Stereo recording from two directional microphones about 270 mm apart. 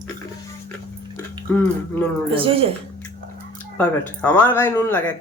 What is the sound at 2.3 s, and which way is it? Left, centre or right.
Speech, centre.